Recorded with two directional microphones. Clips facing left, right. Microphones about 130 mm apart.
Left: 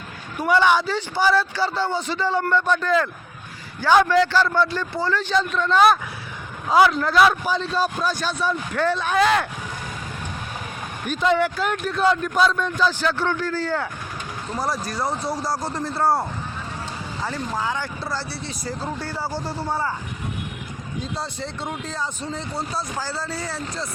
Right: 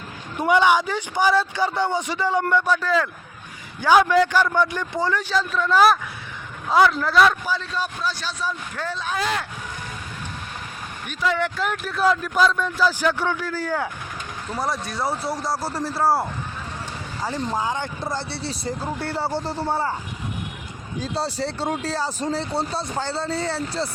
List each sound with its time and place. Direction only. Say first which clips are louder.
0.3 s speech: even; 20° right (ahead or behind)
5.3 s speech: left 2 dB; 5° right (ahead or behind)
7.5 s a man's voice: left 4 dB; 30° left (ahead or behind); by 9.5 s 65° left (ahead or behind)
11.1 s speech: left 4 dB; 25° left (ahead or behind)
11.3 s speech: left 2 dB; 5° left (ahead or behind); by 13.8 s 10° right (ahead or behind)
14.5 s speech: even; centre (ahead or behind)
17.2 s speech: right 2 dB; 15° right (ahead or behind)
18.9 s speech: right 3 dB; 65° right (ahead or behind)
19.2 s speech: right 3 dB; 25° right (ahead or behind)
21.0 s speech: right 5 dB; 35° right (ahead or behind)